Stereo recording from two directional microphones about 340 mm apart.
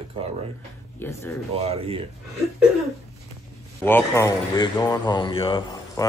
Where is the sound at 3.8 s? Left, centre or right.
Centre.